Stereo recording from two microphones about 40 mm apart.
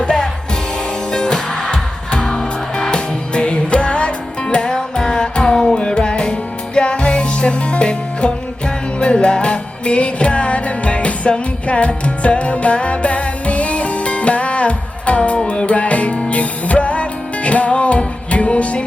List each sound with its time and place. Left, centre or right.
0.0 s music: left